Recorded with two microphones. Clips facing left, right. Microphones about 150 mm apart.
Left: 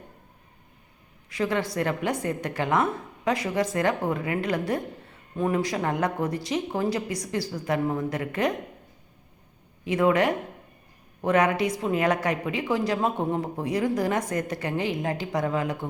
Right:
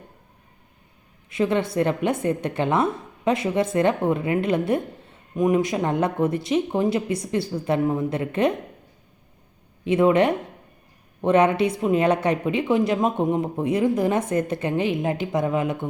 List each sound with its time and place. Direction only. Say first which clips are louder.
1.3 s a woman's voice: right 4 dB; 25° right (ahead or behind)
9.8 s a woman's voice: right 4 dB; 20° right (ahead or behind)